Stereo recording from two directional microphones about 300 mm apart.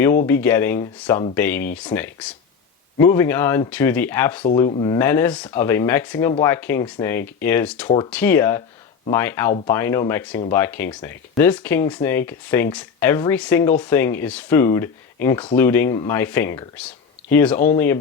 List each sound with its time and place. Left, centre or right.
0.3 s speech: centre
7.9 s speech: centre